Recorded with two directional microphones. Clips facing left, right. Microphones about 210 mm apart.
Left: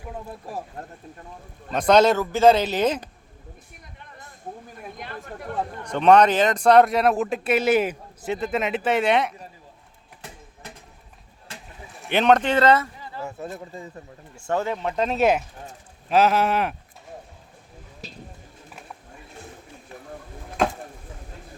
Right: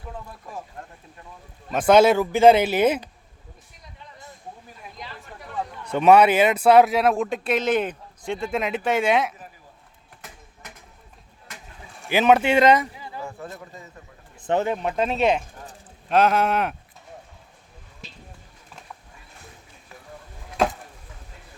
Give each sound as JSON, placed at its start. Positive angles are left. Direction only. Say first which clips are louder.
{"t": 0.3, "sound": "speech", "louder": "left 4 dB", "side_deg": 35}
{"t": 1.7, "sound": "speech", "louder": "right 1 dB", "side_deg": -5}
{"t": 4.9, "sound": "speech", "louder": "left 4 dB", "side_deg": 55}
{"t": 5.9, "sound": "speech", "louder": "right 1 dB", "side_deg": -10}
{"t": 10.2, "sound": "a sound", "louder": "left 3 dB", "side_deg": 30}
{"t": 12.0, "sound": "speech", "louder": "right 1 dB", "side_deg": -5}
{"t": 13.2, "sound": "speech", "louder": "left 6 dB", "side_deg": 20}
{"t": 14.3, "sound": "speech", "louder": "right 2 dB", "side_deg": -20}
{"t": 15.0, "sound": "speech", "louder": "left 2 dB", "side_deg": 0}
{"t": 20.6, "sound": "chop", "louder": "right 1 dB", "side_deg": 0}